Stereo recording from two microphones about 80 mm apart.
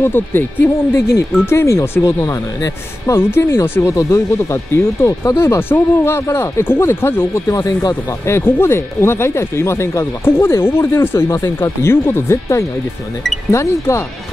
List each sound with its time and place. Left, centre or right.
0.0 s speech: left
3.2 s speech: left
3.9 s speech: left
8.3 s speech: left